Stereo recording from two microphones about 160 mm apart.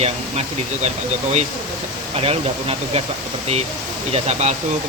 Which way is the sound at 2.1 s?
35° right (ahead or behind).